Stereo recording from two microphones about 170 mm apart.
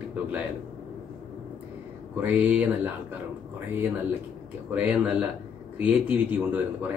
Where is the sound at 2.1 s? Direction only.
10° right (ahead or behind).